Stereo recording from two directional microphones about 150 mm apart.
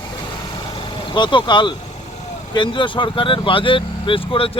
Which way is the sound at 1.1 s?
30° left (ahead or behind).